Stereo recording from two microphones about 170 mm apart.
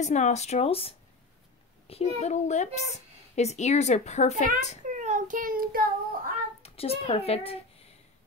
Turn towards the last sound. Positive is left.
turn(degrees=35)  # may be behind; listen again after turning